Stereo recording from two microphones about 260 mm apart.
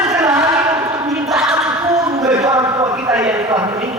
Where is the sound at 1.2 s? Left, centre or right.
Centre.